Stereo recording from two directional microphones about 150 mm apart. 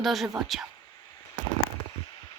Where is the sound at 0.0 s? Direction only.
Centre (ahead or behind).